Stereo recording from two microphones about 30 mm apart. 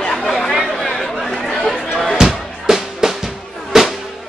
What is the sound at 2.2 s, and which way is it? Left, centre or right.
Music, centre.